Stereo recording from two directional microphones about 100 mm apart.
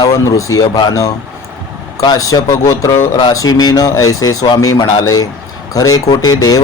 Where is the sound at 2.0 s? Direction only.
40° left (ahead or behind).